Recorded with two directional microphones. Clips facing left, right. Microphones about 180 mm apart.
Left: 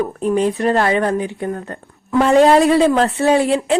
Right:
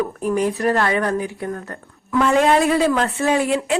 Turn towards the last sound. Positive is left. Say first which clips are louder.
# left 4 dB
turn(degrees=30)  # may be behind; listen again after turning